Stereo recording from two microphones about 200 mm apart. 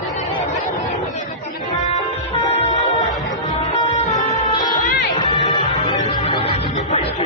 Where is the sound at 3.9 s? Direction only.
35° left (ahead or behind).